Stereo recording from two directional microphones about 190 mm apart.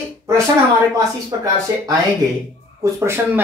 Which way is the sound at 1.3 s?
15° right (ahead or behind).